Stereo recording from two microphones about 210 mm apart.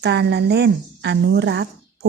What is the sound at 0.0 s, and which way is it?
A woman's voice, 55° right (ahead or behind).